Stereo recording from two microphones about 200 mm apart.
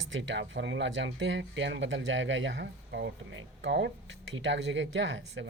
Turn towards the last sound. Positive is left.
turn(degrees=-65)  # may be behind; listen again after turning